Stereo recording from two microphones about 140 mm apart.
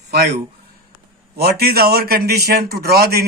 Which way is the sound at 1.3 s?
90° right.